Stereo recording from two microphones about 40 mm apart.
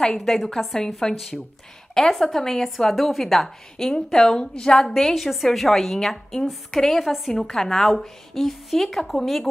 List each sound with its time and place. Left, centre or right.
0.0 s a woman's voice: centre
2.9 s a woman's voice: centre
3.7 s a woman's voice: centre
4.8 s a woman's voice: centre